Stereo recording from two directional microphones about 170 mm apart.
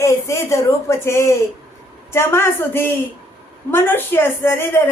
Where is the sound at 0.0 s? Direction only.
15° left (ahead or behind).